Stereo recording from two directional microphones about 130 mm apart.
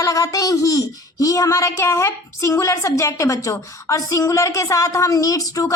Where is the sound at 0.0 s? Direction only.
25° left (ahead or behind).